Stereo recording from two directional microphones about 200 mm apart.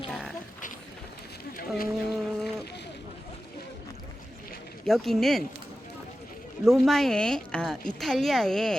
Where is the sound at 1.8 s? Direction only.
55° left (ahead or behind).